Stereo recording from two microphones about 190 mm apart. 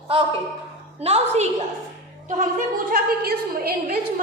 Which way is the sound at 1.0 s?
35° right (ahead or behind).